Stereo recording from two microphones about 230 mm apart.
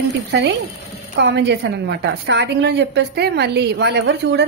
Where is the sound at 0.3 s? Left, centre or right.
Right.